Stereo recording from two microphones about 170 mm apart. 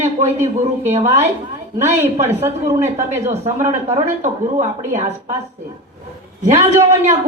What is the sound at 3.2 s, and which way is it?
A man's voice, 40° right (ahead or behind).